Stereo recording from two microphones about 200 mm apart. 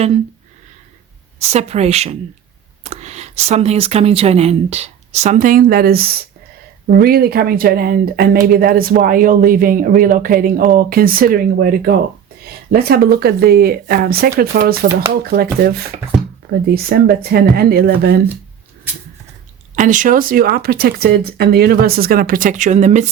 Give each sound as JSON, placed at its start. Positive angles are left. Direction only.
{"t": 1.4, "sound": "speech", "side_deg": -30}
{"t": 16.6, "sound": "speech", "side_deg": -50}
{"t": 19.7, "sound": "speech", "side_deg": -40}